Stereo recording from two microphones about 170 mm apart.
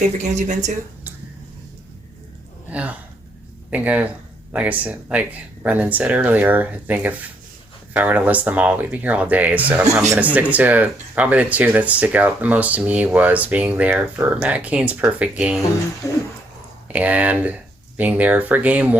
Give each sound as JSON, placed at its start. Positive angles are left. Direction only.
{"t": 0.2, "sound": "speech", "side_deg": -45}
{"t": 2.6, "sound": "speech", "side_deg": -10}
{"t": 16.0, "sound": "speech", "side_deg": 15}
{"t": 16.9, "sound": "speech", "side_deg": -10}